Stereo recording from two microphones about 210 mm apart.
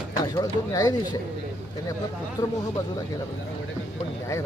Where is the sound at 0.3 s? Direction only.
15° left (ahead or behind).